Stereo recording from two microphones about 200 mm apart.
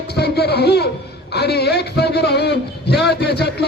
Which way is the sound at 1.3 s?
55° left (ahead or behind).